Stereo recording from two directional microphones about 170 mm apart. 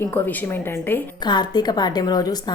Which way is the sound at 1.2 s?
25° left (ahead or behind).